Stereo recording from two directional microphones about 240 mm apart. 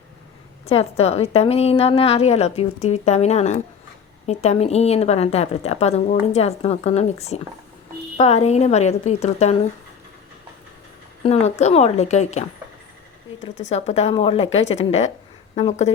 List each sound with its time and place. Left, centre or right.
0.6 s a woman's voice: left
11.2 s a woman's voice: left
13.7 s a woman's voice: left